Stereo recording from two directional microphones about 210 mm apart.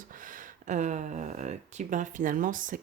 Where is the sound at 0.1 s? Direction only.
40° right (ahead or behind).